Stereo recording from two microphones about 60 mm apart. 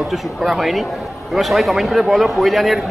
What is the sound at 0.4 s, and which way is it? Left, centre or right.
A man's voice, centre.